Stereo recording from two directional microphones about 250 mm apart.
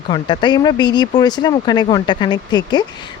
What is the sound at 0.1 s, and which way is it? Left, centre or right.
Speech, centre.